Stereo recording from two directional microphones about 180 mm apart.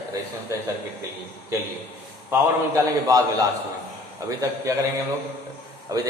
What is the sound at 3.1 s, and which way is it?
A man's voice, 15° right (ahead or behind).